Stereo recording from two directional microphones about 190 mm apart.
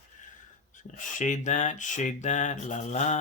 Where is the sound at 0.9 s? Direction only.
40° left (ahead or behind).